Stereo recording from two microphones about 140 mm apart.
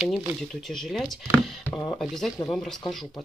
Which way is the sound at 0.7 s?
Centre (ahead or behind).